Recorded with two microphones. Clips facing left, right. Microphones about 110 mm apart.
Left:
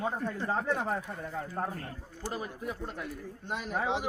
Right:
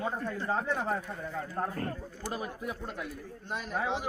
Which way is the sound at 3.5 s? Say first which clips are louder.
Left 1 dB; 15° left (ahead or behind).